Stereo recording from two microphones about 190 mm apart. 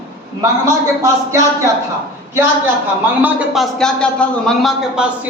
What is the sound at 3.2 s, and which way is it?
A man's voice, 5° right (ahead or behind).